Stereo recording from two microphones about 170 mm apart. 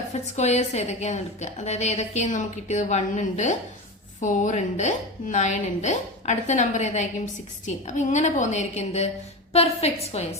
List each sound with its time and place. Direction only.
0.1 s a woman's voice: 40° left (ahead or behind)